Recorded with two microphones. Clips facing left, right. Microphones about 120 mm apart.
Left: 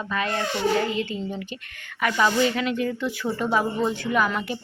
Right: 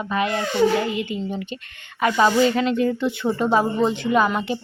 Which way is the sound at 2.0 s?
30° right (ahead or behind).